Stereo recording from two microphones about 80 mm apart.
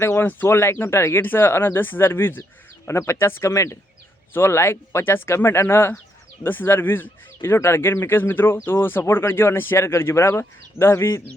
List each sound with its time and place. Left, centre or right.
0.0 s speech: left